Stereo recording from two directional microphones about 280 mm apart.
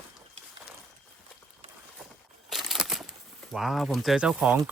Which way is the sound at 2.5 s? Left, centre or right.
Centre.